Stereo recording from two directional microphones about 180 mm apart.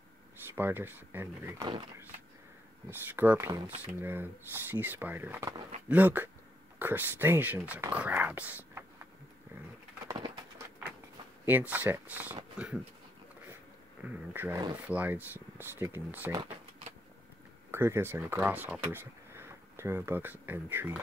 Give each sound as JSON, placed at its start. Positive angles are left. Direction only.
{"t": 0.6, "sound": "speech", "side_deg": -10}
{"t": 2.9, "sound": "speech", "side_deg": -10}
{"t": 10.0, "sound": "bird", "side_deg": -20}
{"t": 11.4, "sound": "speech", "side_deg": -10}
{"t": 14.0, "sound": "speech", "side_deg": -10}
{"t": 17.6, "sound": "speech", "side_deg": -15}